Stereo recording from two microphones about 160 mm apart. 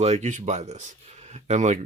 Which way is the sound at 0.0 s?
45° right (ahead or behind).